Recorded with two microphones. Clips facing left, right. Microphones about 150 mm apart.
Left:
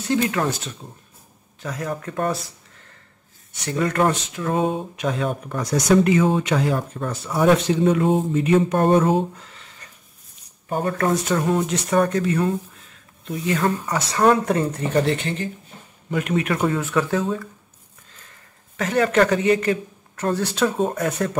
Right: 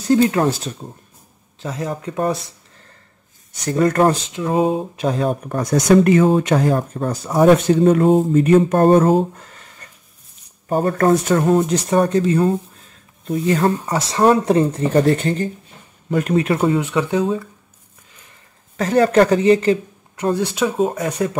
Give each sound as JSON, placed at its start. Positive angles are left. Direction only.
{"t": 0.0, "sound": "speech", "side_deg": -35}
{"t": 3.5, "sound": "speech", "side_deg": -40}
{"t": 11.1, "sound": "speech", "side_deg": -50}
{"t": 11.5, "sound": "speech", "side_deg": -35}
{"t": 18.8, "sound": "speech", "side_deg": -35}
{"t": 20.2, "sound": "speech", "side_deg": -10}